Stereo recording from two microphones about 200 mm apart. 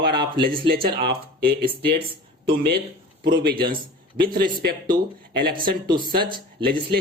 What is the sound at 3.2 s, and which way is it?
Speech, 50° right (ahead or behind).